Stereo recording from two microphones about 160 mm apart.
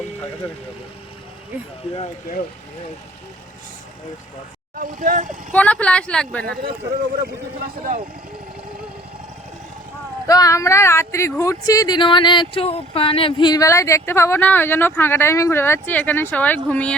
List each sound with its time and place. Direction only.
4.8 s speech: 60° right (ahead or behind)
5.5 s speech: 10° left (ahead or behind)
7.6 s speech: 55° right (ahead or behind)
10.2 s speech: 20° left (ahead or behind)